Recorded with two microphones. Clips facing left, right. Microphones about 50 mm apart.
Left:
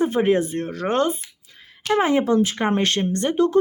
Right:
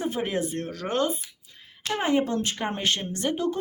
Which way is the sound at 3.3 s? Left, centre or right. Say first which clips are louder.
Left 13 dB; left.